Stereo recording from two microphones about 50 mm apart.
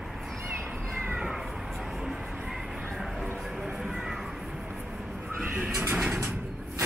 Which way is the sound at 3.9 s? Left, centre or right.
Centre.